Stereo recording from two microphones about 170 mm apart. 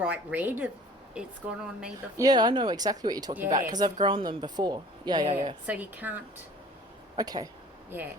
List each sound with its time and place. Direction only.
0.0 s a woman's voice: 10° right (ahead or behind)
2.1 s speech: 25° right (ahead or behind)
5.6 s a woman's voice: 10° right (ahead or behind)
7.2 s speech: 20° right (ahead or behind)
7.9 s speech: 10° right (ahead or behind)